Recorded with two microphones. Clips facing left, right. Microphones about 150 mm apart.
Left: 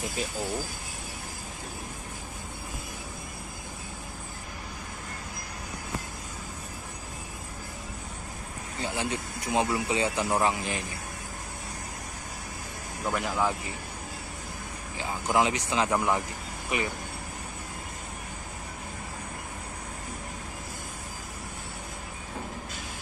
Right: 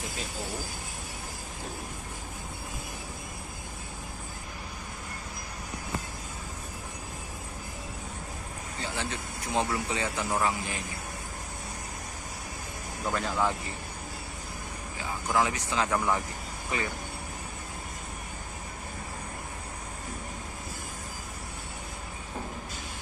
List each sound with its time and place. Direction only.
8.9 s speech: 15° left (ahead or behind)
13.0 s speech: 10° left (ahead or behind)
15.2 s speech: 20° left (ahead or behind)